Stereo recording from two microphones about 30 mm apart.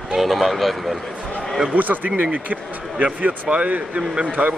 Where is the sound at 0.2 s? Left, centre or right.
Centre.